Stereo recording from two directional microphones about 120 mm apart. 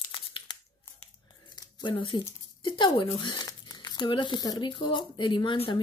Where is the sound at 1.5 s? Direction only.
40° left (ahead or behind).